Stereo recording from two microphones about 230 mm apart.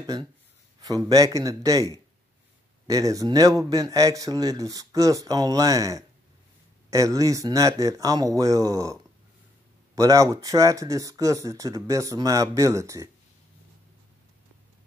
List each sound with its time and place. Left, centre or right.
0.0 s speech: centre
9.9 s speech: centre